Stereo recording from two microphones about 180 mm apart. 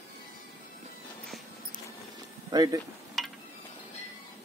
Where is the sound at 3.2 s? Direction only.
Centre (ahead or behind).